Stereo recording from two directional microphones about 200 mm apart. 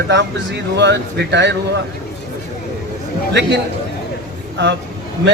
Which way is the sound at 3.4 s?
60° right (ahead or behind).